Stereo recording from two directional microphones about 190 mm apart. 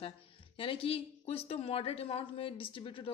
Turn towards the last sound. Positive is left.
turn(degrees=25)  # may be behind; listen again after turning